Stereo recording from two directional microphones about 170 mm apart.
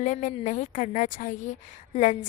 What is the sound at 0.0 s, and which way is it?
Speech, 45° left (ahead or behind).